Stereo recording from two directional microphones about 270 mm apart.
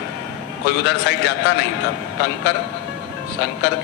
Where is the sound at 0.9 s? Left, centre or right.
Left.